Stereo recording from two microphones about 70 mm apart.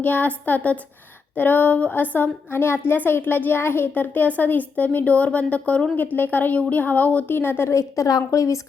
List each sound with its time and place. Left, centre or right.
0.0 s a woman's voice: left
7.7 s speech: left